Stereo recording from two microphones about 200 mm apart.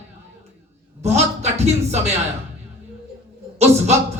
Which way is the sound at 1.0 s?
35° right (ahead or behind).